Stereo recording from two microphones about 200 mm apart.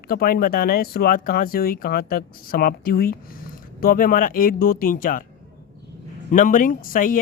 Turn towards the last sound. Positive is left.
turn(degrees=45)  # may be behind; listen again after turning